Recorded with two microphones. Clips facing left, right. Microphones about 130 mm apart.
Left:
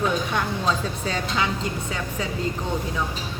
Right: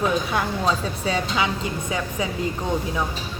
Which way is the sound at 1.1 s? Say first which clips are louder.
Right 3 dB; 5° right (ahead or behind).